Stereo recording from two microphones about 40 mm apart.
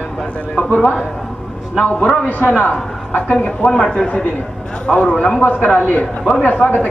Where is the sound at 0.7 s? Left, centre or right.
Left.